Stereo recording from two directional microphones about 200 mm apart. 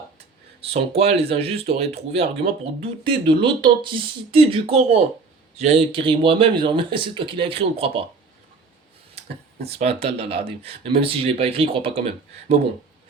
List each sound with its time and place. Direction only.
0.6 s speech: 30° right (ahead or behind)
9.6 s speech: 30° right (ahead or behind)